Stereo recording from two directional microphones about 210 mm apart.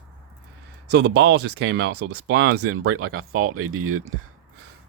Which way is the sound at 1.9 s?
90° right.